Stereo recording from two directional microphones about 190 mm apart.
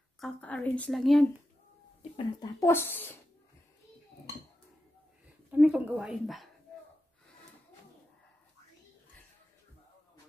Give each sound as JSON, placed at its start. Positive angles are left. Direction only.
{"t": 0.2, "sound": "a woman's voice", "side_deg": 10}
{"t": 2.1, "sound": "speech", "side_deg": 20}
{"t": 2.7, "sound": "a woman's voice", "side_deg": 10}
{"t": 5.5, "sound": "speech", "side_deg": -5}